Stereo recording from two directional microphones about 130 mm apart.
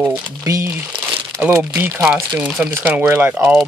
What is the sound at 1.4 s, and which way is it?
Speech, 15° right (ahead or behind).